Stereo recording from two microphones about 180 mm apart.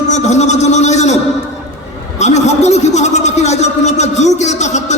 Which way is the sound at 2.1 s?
40° left (ahead or behind).